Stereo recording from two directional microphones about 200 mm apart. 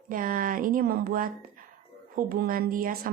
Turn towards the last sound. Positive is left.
turn(degrees=-45)  # may be behind; listen again after turning